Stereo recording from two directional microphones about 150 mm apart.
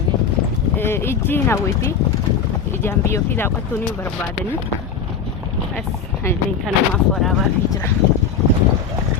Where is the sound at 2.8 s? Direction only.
15° left (ahead or behind).